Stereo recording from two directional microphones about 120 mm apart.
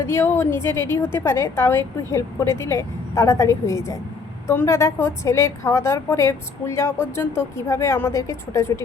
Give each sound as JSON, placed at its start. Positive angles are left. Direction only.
{"t": 0.0, "sound": "a woman's voice", "side_deg": 20}